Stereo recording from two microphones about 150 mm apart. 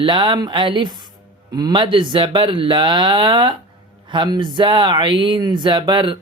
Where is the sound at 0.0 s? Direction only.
35° right (ahead or behind).